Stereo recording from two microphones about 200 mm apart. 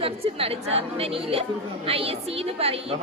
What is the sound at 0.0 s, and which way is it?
Speech, 30° right (ahead or behind).